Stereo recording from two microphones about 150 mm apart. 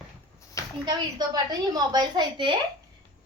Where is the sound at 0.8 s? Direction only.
25° right (ahead or behind).